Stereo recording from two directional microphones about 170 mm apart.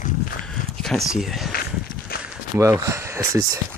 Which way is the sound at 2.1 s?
60° left (ahead or behind).